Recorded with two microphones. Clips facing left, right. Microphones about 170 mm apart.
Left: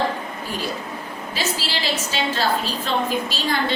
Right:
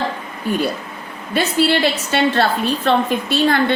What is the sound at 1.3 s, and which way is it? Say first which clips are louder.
A woman's voice: right 11 dB; 60° right (ahead or behind).